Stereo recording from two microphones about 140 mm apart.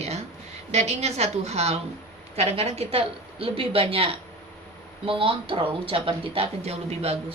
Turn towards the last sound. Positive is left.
turn(degrees=-45)  # may be behind; listen again after turning